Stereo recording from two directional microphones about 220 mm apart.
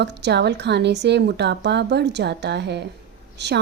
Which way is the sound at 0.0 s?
50° right (ahead or behind).